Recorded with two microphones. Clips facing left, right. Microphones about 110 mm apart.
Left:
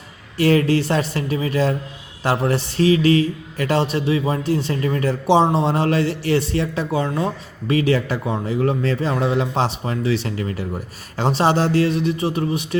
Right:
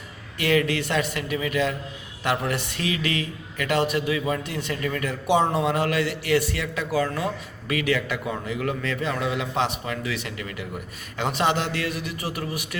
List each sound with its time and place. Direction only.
0.3 s a man's voice: 35° left (ahead or behind)